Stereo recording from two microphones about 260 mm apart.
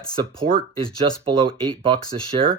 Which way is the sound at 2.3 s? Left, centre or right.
Right.